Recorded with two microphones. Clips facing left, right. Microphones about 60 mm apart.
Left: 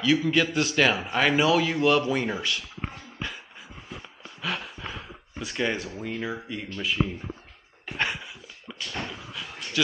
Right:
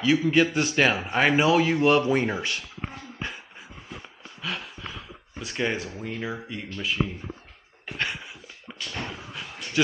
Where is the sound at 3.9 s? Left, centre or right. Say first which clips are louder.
Even; centre.